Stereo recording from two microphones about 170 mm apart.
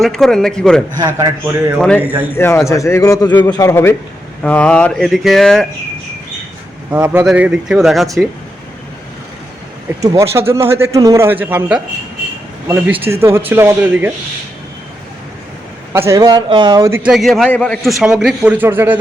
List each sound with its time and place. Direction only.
0.0 s a man's voice: 5° left (ahead or behind)
0.9 s a man's voice: 20° right (ahead or behind)
2.3 s a man's voice: 15° left (ahead or behind)
6.9 s a man's voice: 10° right (ahead or behind)
10.0 s a man's voice: 20° right (ahead or behind)
15.9 s a man's voice: 15° right (ahead or behind)
17.1 s a man's voice: centre (ahead or behind)